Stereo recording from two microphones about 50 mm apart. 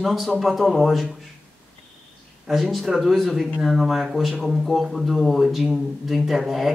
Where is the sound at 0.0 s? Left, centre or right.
Centre.